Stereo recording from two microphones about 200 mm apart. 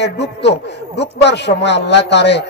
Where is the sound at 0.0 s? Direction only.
60° left (ahead or behind).